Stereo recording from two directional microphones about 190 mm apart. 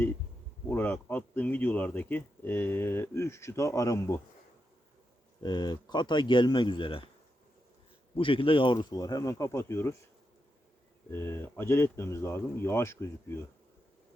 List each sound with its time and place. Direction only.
0.7 s speech: 10° left (ahead or behind)
5.4 s speech: 20° left (ahead or behind)
8.1 s speech: 25° left (ahead or behind)
11.1 s speech: 10° left (ahead or behind)